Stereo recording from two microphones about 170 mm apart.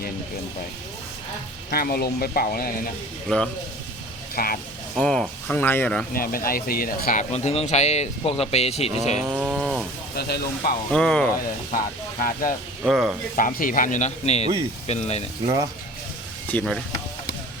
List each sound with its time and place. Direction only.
1.7 s speech: 65° left (ahead or behind)
3.2 s speech: 5° left (ahead or behind)
4.4 s speech: 60° left (ahead or behind)
4.9 s speech: centre (ahead or behind)
6.1 s speech: 60° left (ahead or behind)
7.3 s speech: 40° left (ahead or behind)
9.2 s cattle: 10° right (ahead or behind)
10.2 s speech: 70° left (ahead or behind)
10.9 s speech: 5° left (ahead or behind)
11.7 s speech: 55° left (ahead or behind)
12.8 s speech: 5° right (ahead or behind)
13.3 s speech: 55° left (ahead or behind)
15.4 s speech: 25° right (ahead or behind)
16.5 s speech: 5° left (ahead or behind)